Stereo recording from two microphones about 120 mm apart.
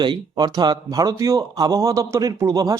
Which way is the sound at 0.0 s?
40° right (ahead or behind).